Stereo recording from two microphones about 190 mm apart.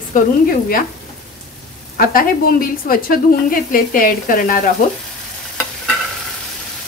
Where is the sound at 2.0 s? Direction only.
50° left (ahead or behind).